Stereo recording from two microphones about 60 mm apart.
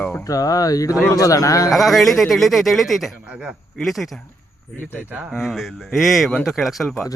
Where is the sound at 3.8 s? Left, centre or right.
Centre.